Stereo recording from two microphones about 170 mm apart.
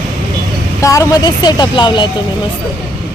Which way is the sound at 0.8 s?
20° left (ahead or behind).